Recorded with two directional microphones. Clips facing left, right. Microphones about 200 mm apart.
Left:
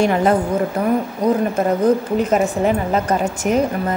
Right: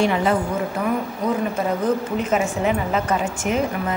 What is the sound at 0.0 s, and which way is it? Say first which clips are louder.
A woman's voice: left 4 dB; 45° left (ahead or behind).